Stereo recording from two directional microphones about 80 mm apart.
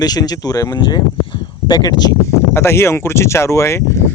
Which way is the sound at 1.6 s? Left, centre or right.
Left.